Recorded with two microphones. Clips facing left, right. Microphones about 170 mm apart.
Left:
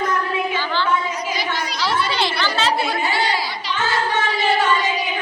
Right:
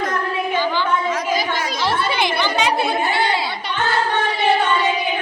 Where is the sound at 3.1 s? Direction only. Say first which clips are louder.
Right 2 dB; 55° right (ahead or behind).